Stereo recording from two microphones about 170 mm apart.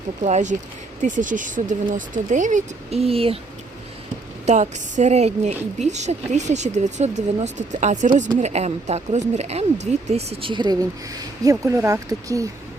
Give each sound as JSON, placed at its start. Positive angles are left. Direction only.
{"t": 0.2, "sound": "a woman's voice", "side_deg": -45}
{"t": 4.4, "sound": "a woman's voice", "side_deg": -45}